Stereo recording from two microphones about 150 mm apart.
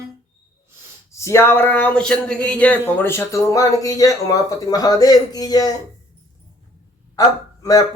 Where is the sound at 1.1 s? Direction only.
20° left (ahead or behind).